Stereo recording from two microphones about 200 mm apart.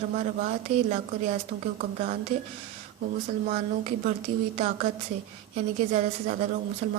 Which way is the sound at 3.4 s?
40° right (ahead or behind).